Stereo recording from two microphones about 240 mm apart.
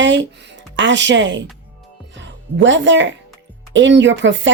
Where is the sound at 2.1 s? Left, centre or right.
Right.